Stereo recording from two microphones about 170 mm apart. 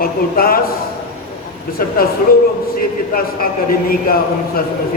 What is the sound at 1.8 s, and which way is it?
A man's voice, 60° left (ahead or behind).